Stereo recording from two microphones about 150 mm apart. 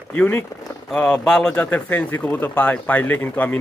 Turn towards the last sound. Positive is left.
turn(degrees=10)  # may be behind; listen again after turning